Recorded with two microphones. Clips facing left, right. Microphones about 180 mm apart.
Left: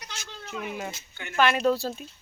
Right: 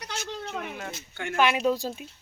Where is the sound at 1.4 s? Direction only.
10° right (ahead or behind).